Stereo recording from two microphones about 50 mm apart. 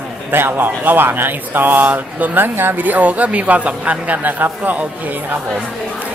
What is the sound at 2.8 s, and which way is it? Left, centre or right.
Speech, right.